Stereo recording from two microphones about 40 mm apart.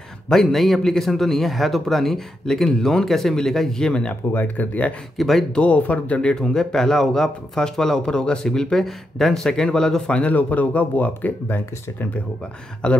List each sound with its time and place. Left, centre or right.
0.3 s a man's voice: centre
3.8 s speech: left
4.3 s speech: left
5.1 s speech: centre
5.5 s speech: left
6.4 s a man's voice: centre
10.0 s speech: left
10.3 s speech: left
11.4 s speech: left
12.8 s speech: left